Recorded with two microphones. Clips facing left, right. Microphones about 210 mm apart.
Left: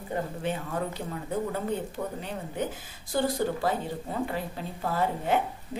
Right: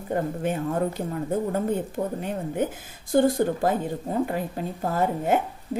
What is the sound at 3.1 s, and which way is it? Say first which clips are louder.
Speech: right 7 dB; 50° right (ahead or behind).